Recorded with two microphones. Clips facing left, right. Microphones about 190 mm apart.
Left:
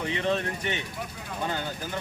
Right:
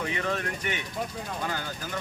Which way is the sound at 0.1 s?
25° left (ahead or behind).